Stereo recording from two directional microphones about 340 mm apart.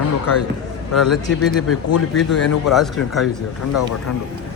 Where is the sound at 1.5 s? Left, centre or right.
Left.